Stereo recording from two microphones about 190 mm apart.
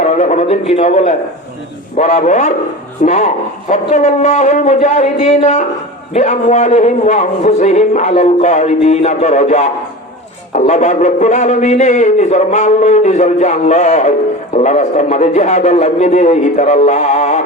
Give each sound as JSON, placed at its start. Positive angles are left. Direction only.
{"t": 0.0, "sound": "a man's voice", "side_deg": 40}